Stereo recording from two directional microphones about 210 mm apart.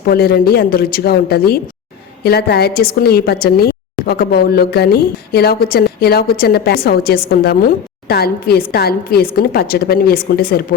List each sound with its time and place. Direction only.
0.1 s a woman's voice: 45° left (ahead or behind)